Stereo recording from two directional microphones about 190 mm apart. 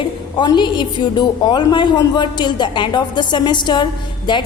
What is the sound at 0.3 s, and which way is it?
A woman's voice, 25° left (ahead or behind).